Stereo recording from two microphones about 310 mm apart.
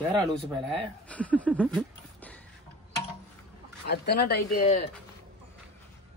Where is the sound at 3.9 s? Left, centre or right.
Left.